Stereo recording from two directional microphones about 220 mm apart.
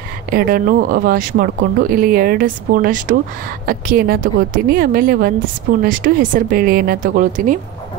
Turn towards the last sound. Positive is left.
turn(degrees=-35)  # may be behind; listen again after turning